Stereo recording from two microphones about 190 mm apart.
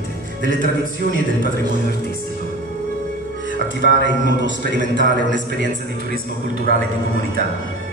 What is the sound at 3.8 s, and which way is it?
Speech, 70° left (ahead or behind).